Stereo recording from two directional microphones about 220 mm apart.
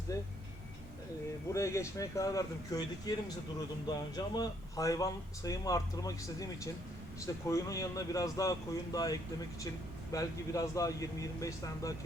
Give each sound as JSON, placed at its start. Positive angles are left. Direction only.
{"t": 0.1, "sound": "speech", "side_deg": 15}
{"t": 1.5, "sound": "speech", "side_deg": 15}
{"t": 3.8, "sound": "speech", "side_deg": 15}